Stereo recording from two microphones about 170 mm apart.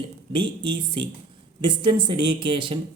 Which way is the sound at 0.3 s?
30° right (ahead or behind).